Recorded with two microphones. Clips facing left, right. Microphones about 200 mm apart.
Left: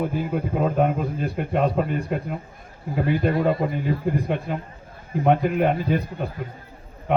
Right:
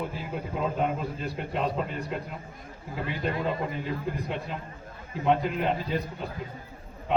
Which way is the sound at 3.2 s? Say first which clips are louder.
Left 5 dB; 50° left (ahead or behind).